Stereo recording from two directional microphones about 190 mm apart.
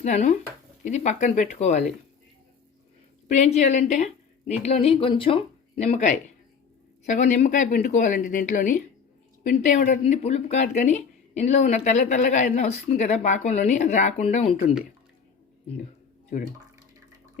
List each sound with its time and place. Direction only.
0.0 s a woman's voice: 40° left (ahead or behind)
3.2 s a woman's voice: 40° left (ahead or behind)